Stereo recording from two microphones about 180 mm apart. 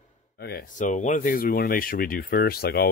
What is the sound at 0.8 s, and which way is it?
Speech, 45° left (ahead or behind).